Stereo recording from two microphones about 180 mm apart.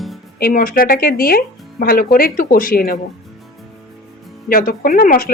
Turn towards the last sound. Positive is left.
turn(degrees=50)  # may be behind; listen again after turning